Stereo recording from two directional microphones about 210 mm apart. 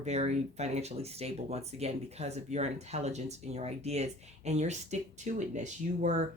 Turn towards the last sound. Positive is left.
turn(degrees=-35)  # may be behind; listen again after turning